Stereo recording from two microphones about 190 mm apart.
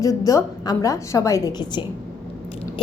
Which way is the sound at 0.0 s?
15° left (ahead or behind).